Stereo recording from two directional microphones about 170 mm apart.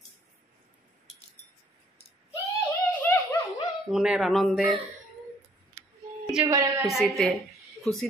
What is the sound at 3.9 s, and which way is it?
Speech, 5° right (ahead or behind).